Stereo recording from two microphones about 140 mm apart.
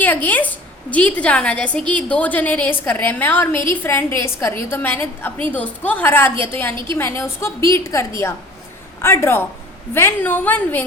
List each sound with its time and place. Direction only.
0.0 s a woman's voice: 10° left (ahead or behind)